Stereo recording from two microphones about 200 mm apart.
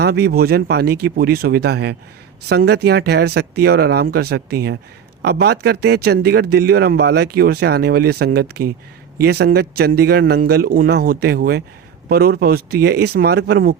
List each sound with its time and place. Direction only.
0.0 s speech: 55° right (ahead or behind)